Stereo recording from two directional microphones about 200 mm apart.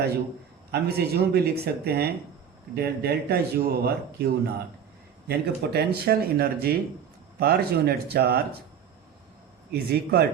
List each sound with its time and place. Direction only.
0.7 s speech: 55° right (ahead or behind)
9.7 s speech: 55° right (ahead or behind)